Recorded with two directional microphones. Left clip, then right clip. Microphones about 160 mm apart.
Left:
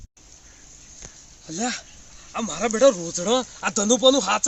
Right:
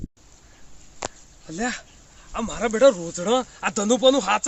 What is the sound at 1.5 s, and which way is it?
Speech, 5° right (ahead or behind).